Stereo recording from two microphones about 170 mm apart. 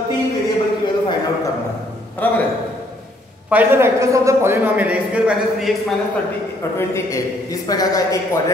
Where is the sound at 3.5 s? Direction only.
10° right (ahead or behind).